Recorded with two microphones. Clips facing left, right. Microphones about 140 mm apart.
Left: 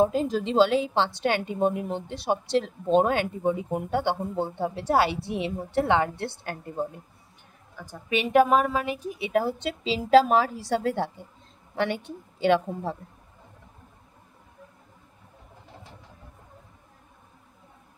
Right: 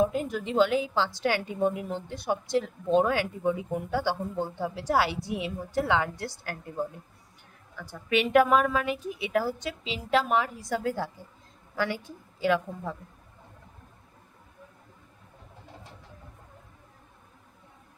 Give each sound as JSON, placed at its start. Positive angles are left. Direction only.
{"t": 0.0, "sound": "a woman's voice", "side_deg": 30}
{"t": 2.5, "sound": "speech", "side_deg": 70}
{"t": 3.0, "sound": "a woman's voice", "side_deg": 25}
{"t": 7.9, "sound": "a woman's voice", "side_deg": 20}